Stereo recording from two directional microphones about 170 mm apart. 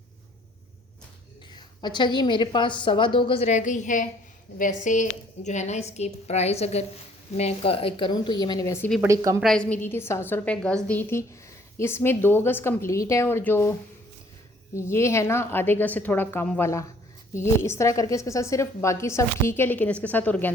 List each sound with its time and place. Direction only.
1.5 s a woman's voice: 25° left (ahead or behind)
3.5 s a woman's voice: 45° left (ahead or behind); by 8.9 s 15° left (ahead or behind)
9.0 s a woman's voice: 20° right (ahead or behind)
9.4 s a woman's voice: 5° left (ahead or behind)
14.8 s a woman's voice: 15° left (ahead or behind)